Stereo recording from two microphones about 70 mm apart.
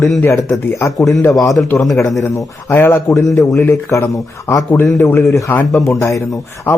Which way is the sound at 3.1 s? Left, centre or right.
Left.